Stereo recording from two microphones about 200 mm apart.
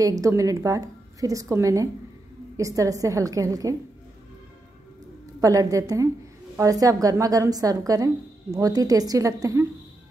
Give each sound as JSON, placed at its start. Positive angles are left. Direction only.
{"t": 0.0, "sound": "a woman's voice", "side_deg": -15}
{"t": 5.4, "sound": "a woman's voice", "side_deg": -15}